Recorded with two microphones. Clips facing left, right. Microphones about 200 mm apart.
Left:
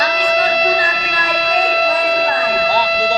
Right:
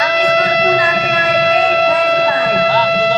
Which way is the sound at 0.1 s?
55° right (ahead or behind).